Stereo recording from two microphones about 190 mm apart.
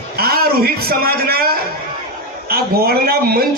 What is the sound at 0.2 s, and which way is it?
A man's voice, 55° right (ahead or behind).